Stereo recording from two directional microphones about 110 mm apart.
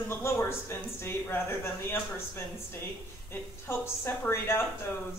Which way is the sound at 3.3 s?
20° left (ahead or behind).